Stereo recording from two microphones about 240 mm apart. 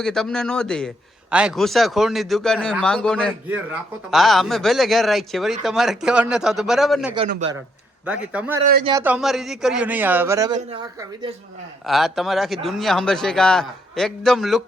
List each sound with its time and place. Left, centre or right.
0.0 s a man's voice: centre
7.3 s speech: right
8.0 s a man's voice: centre
11.9 s a man's voice: centre